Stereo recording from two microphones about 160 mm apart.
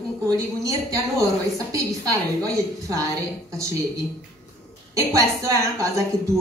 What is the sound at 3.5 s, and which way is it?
A woman's voice, 20° right (ahead or behind).